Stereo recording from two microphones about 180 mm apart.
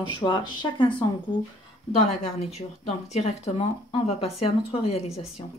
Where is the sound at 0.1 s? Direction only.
25° left (ahead or behind).